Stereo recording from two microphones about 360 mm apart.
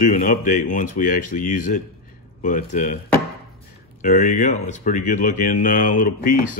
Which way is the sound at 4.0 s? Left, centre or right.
Centre.